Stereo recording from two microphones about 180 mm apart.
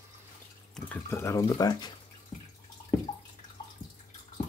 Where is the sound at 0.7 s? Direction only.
10° left (ahead or behind).